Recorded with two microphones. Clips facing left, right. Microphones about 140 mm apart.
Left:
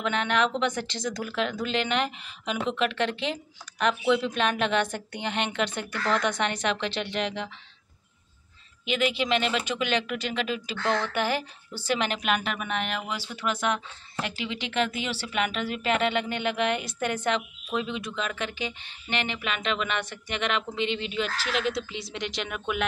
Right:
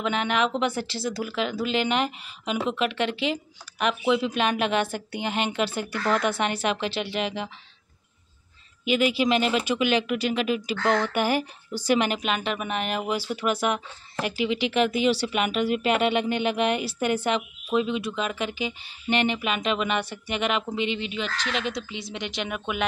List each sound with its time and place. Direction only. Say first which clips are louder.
0.0 s speech: right 1 dB; 5° right (ahead or behind)
8.8 s speech: right 4 dB; 10° right (ahead or behind)
12.2 s speech: right 1 dB; centre (ahead or behind)